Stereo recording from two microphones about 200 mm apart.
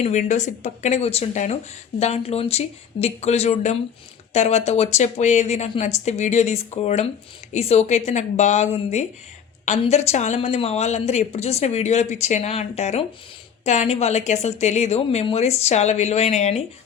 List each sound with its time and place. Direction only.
0.0 s speech: 35° left (ahead or behind)